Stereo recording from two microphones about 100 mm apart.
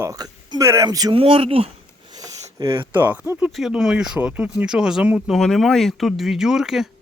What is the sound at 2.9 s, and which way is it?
Speech, 15° right (ahead or behind).